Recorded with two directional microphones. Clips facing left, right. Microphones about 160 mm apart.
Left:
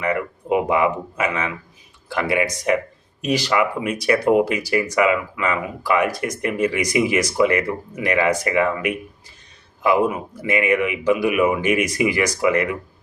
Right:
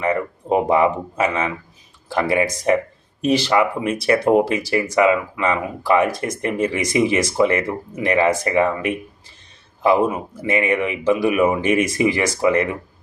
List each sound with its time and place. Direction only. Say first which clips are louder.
0.0 s speech: right 2 dB; 30° right (ahead or behind)